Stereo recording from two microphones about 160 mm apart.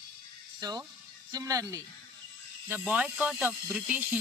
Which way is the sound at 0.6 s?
25° right (ahead or behind).